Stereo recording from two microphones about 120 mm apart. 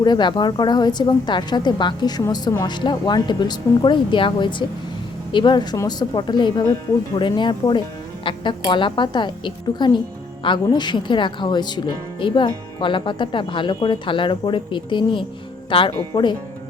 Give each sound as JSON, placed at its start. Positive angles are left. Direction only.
{"t": 0.0, "sound": "a woman's voice", "side_deg": 40}
{"t": 5.7, "sound": "a woman's voice", "side_deg": 25}
{"t": 6.1, "sound": "a woman's voice", "side_deg": 40}